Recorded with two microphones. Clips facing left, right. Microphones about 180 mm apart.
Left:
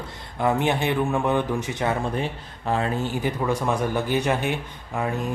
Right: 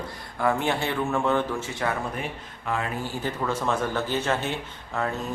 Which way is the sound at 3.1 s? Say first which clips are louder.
Left 4 dB; 15° left (ahead or behind).